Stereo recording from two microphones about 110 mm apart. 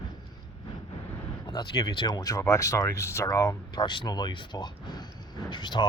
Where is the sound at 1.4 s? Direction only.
45° left (ahead or behind).